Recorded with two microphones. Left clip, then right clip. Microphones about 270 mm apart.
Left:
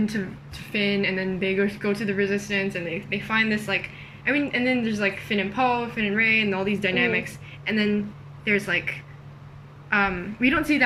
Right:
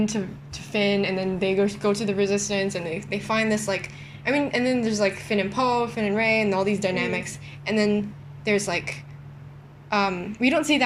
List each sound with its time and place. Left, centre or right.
0.0 s a woman's voice: centre